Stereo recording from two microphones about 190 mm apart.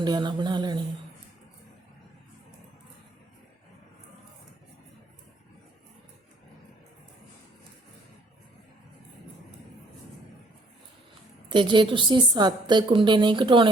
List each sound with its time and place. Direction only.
0.0 s a woman's voice: 25° right (ahead or behind)
11.4 s a woman's voice: 25° right (ahead or behind)